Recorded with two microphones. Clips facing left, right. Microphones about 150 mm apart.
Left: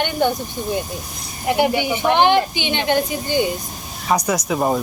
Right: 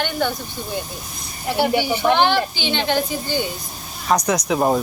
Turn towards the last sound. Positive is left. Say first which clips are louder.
# right 1 dB
turn(degrees=0)  # may be behind; listen again after turning